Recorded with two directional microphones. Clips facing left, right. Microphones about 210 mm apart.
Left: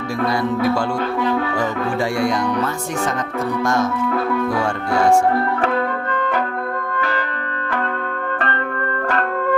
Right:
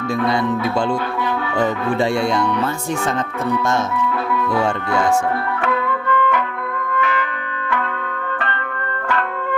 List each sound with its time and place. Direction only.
2.2 s speech: 25° right (ahead or behind)
5.6 s music: 35° left (ahead or behind)